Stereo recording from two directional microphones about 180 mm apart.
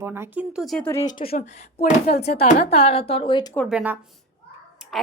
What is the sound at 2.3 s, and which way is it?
Speech, 35° left (ahead or behind).